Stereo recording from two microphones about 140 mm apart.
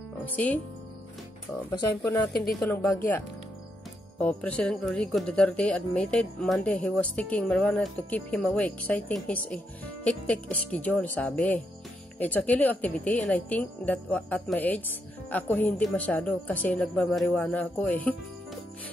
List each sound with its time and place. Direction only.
0.2 s speech: 10° left (ahead or behind)
1.7 s speech: 25° left (ahead or behind)
2.6 s speech: 15° left (ahead or behind)
4.2 s speech: 10° left (ahead or behind)